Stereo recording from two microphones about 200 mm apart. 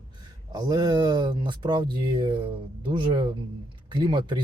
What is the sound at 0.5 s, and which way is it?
Speech, 20° right (ahead or behind).